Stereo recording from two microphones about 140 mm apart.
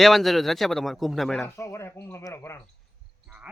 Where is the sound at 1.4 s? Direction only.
20° left (ahead or behind).